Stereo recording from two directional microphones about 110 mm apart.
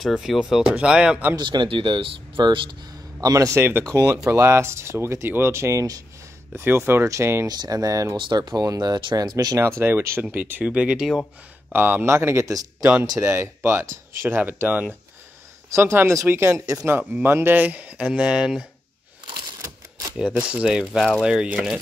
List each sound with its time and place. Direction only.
0.0 s speech: centre (ahead or behind)
1.3 s speech: 40° right (ahead or behind)
6.5 s speech: 20° right (ahead or behind)
7.4 s speech: 40° right (ahead or behind)
9.6 s speech: 25° right (ahead or behind); by 11.2 s 5° right (ahead or behind)
11.7 s speech: 20° right (ahead or behind)
19.3 s a sound: 30° right (ahead or behind)
20.2 s speech: 10° right (ahead or behind)